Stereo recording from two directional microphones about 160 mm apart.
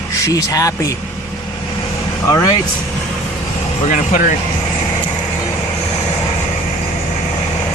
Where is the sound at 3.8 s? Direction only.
50° left (ahead or behind).